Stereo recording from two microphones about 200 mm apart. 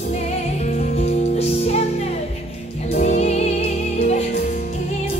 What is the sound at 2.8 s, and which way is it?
Music, 35° left (ahead or behind).